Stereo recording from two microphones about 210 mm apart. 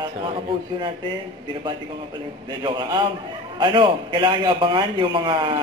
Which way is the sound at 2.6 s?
20° right (ahead or behind).